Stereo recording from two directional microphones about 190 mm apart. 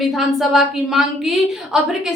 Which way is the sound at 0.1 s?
Centre (ahead or behind).